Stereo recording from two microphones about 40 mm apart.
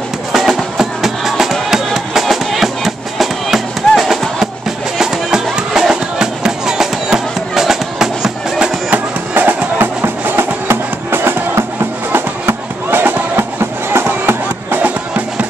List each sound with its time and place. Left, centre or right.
0.3 s music: centre
4.9 s music: centre
8.9 s music: right
9.8 s music: right
12.1 s music: right
14.7 s music: right